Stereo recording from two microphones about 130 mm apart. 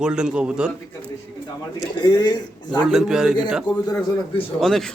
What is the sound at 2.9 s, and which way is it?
Speech, 5° right (ahead or behind).